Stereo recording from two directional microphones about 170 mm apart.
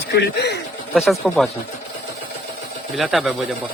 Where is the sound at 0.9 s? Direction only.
Centre (ahead or behind).